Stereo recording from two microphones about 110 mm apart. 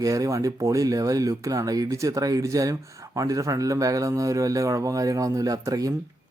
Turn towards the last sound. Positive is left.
turn(degrees=-30)  # may be behind; listen again after turning